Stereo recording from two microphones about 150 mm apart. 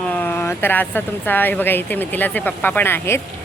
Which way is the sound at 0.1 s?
15° left (ahead or behind).